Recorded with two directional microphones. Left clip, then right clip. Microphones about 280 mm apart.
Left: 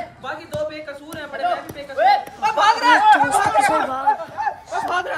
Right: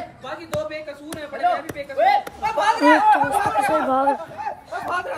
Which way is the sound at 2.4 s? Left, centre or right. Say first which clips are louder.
Left 3 dB; left.